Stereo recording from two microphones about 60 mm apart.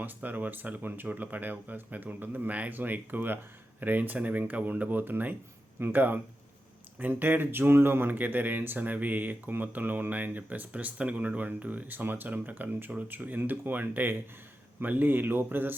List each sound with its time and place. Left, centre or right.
0.0 s speech: right